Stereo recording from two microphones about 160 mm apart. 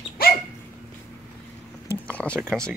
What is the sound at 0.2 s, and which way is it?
Dog, 70° left (ahead or behind).